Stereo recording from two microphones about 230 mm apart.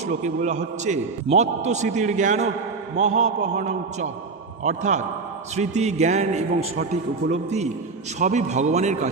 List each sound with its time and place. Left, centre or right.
0.2 s a man's voice: right